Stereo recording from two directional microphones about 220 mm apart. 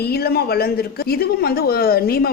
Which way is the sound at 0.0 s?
45° left (ahead or behind).